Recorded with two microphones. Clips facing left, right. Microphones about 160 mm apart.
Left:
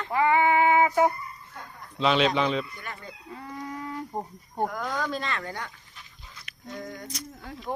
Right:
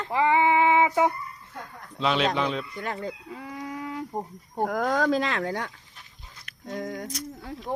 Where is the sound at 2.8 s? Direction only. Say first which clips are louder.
Right 9 dB; 90° right.